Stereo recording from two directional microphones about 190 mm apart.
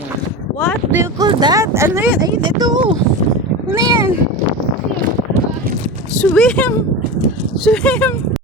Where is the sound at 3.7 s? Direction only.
15° right (ahead or behind).